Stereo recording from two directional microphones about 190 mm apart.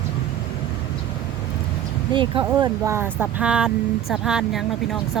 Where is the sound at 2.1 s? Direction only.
25° right (ahead or behind).